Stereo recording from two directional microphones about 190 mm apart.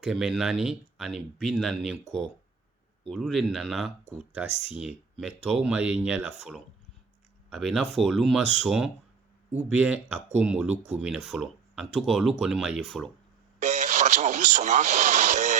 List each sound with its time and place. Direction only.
0.0 s speech: 5° right (ahead or behind)
5.2 s speech: 5° right (ahead or behind)
13.6 s radio: 40° right (ahead or behind)